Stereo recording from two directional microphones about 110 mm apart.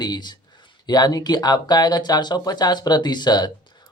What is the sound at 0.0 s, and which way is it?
Speech, 40° left (ahead or behind).